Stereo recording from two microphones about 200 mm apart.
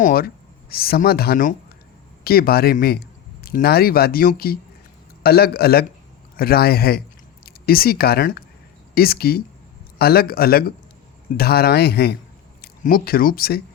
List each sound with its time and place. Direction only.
0.0 s speech: 50° left (ahead or behind)